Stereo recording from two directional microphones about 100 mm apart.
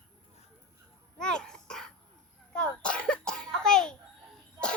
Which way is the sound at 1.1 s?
5° left (ahead or behind).